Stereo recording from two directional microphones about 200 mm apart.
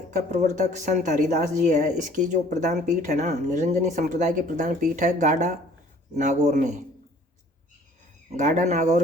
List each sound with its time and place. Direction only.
0.1 s speech: 40° right (ahead or behind)
8.4 s speech: 35° right (ahead or behind)